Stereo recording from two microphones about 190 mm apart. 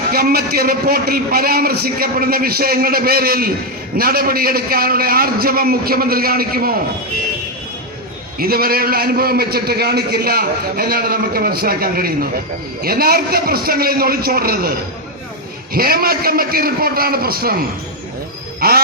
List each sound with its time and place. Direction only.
0.1 s a man's voice: 55° right (ahead or behind)
8.4 s a man's voice: 50° right (ahead or behind)